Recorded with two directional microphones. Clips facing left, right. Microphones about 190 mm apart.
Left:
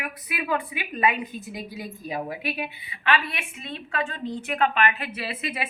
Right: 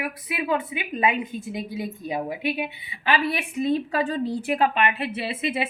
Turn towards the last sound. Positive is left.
turn(degrees=-25)  # may be behind; listen again after turning